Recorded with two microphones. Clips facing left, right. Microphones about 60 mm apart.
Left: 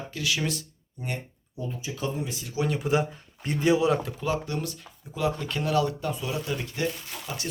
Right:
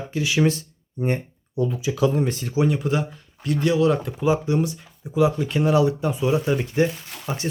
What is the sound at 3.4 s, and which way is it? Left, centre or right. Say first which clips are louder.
Speech: right 3 dB; left.